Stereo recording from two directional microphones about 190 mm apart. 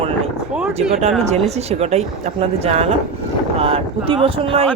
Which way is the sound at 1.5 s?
35° right (ahead or behind).